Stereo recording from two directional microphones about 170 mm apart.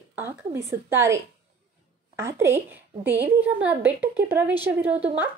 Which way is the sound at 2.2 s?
15° right (ahead or behind).